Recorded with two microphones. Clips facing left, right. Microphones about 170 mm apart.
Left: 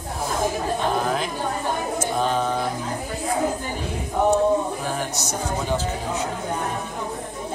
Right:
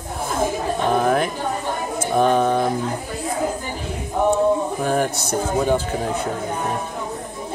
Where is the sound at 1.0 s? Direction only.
55° right (ahead or behind).